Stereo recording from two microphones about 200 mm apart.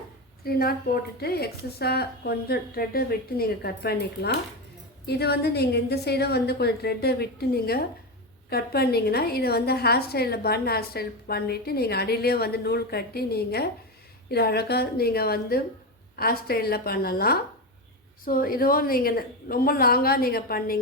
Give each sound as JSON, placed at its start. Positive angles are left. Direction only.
{"t": 0.4, "sound": "a woman's voice", "side_deg": 50}